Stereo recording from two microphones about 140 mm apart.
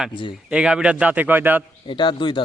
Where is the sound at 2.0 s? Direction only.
35° left (ahead or behind).